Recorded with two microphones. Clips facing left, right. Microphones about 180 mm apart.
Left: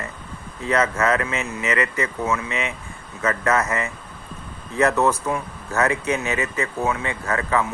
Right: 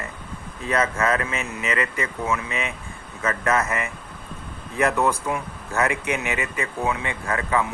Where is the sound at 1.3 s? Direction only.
20° left (ahead or behind).